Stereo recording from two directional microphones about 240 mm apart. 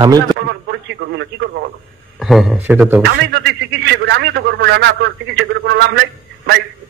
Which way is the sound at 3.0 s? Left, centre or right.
Right.